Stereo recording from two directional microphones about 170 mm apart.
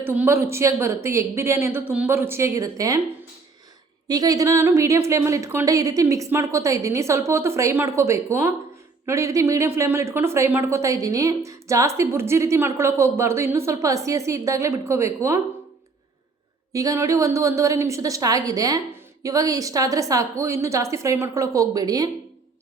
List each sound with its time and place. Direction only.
0.0 s speech: 10° right (ahead or behind)
4.1 s speech: 20° right (ahead or behind)
16.7 s a woman's voice: 20° right (ahead or behind)